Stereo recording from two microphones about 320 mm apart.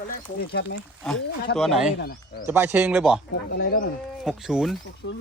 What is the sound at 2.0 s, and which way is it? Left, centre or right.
Speech, left.